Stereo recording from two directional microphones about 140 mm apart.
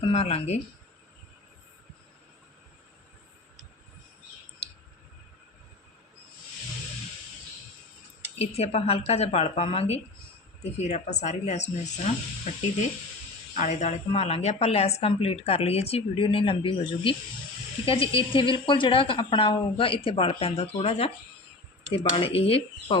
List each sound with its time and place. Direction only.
0.0 s a woman's voice: 45° left (ahead or behind)
8.4 s a woman's voice: 45° left (ahead or behind)
13.6 s a woman's voice: 55° left (ahead or behind)